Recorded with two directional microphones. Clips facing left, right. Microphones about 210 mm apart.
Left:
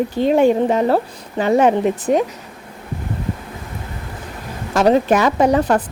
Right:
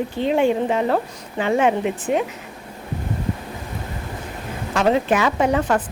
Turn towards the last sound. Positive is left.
turn(degrees=40)  # may be behind; listen again after turning